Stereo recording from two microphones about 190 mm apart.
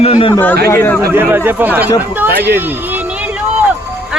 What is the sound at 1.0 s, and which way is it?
Speech, 10° right (ahead or behind).